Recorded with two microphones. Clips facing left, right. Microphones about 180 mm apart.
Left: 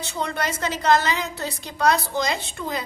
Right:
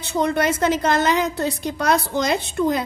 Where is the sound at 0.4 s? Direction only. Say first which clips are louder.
Right 3 dB; 55° right (ahead or behind).